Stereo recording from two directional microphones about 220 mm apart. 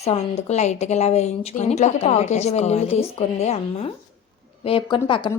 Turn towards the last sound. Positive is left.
turn(degrees=20)  # may be behind; listen again after turning